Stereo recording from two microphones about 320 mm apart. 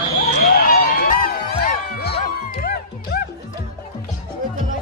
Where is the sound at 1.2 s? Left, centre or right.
Left.